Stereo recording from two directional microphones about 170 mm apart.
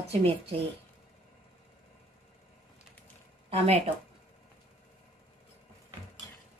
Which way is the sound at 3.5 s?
35° right (ahead or behind).